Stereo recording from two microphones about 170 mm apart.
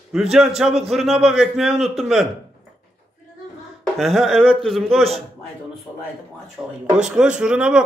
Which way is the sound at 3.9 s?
Centre (ahead or behind).